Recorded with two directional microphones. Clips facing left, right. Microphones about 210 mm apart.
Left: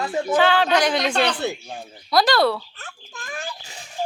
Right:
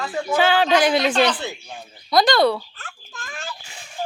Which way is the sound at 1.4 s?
45° left (ahead or behind).